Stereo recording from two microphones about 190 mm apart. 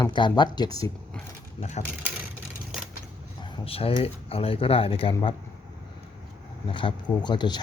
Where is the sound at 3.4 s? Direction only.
30° left (ahead or behind).